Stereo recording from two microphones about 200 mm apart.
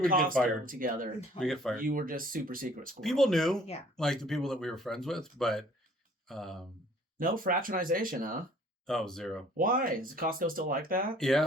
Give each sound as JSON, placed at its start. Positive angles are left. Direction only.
{"t": 0.0, "sound": "speech", "side_deg": -45}
{"t": 1.4, "sound": "speech", "side_deg": 0}
{"t": 1.7, "sound": "speech", "side_deg": -45}
{"t": 3.0, "sound": "speech", "side_deg": 0}
{"t": 7.2, "sound": "speech", "side_deg": -45}
{"t": 8.9, "sound": "speech", "side_deg": 0}
{"t": 9.6, "sound": "speech", "side_deg": -45}
{"t": 11.2, "sound": "speech", "side_deg": 0}